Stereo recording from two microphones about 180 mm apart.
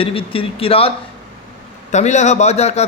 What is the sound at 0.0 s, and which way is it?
A man's voice, 30° left (ahead or behind).